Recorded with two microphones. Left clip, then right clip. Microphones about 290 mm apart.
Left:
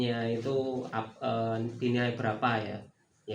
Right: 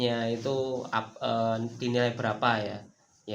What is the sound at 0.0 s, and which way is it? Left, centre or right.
Speech, right.